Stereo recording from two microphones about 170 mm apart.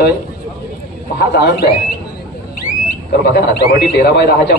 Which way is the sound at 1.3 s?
70° left (ahead or behind).